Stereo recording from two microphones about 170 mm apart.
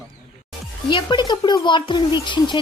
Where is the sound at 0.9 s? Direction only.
25° left (ahead or behind).